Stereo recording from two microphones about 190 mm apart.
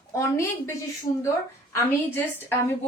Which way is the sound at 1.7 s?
15° left (ahead or behind).